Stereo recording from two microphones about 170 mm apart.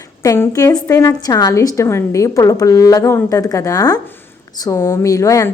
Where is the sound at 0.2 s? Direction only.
20° left (ahead or behind).